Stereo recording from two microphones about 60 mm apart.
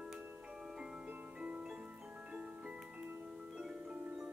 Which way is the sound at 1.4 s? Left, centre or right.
Centre.